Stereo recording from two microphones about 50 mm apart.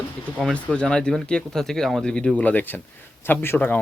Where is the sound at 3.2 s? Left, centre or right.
Left.